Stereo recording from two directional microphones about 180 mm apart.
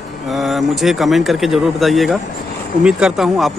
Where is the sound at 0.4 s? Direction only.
Centre (ahead or behind).